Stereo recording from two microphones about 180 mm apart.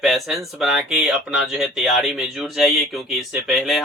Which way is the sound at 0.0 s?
Centre (ahead or behind).